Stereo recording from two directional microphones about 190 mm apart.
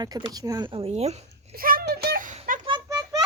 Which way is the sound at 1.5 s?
50° right (ahead or behind).